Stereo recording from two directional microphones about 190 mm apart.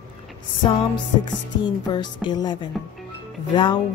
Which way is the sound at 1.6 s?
25° left (ahead or behind).